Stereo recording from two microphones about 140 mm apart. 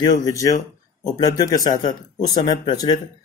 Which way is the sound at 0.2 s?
25° left (ahead or behind).